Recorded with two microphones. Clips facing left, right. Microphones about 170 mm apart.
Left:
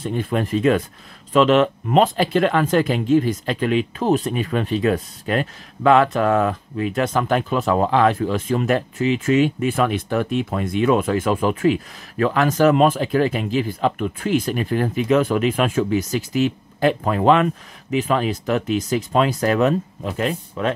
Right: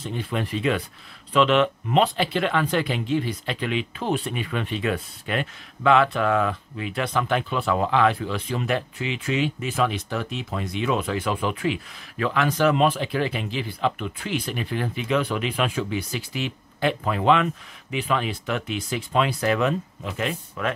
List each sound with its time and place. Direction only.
0.0 s speech: 50° left (ahead or behind)